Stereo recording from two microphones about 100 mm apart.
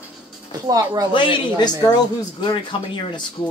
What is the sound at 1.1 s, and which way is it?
Speech, 55° left (ahead or behind).